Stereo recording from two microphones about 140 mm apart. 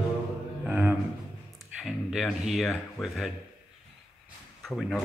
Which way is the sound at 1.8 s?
Centre (ahead or behind).